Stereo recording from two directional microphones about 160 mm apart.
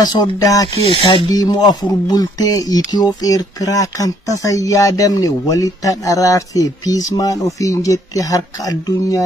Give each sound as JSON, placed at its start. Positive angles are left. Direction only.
{"t": 0.0, "sound": "speech", "side_deg": 25}
{"t": 0.8, "sound": "speech", "side_deg": 30}